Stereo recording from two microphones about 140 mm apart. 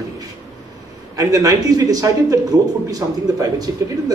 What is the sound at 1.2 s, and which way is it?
Speech, 25° right (ahead or behind).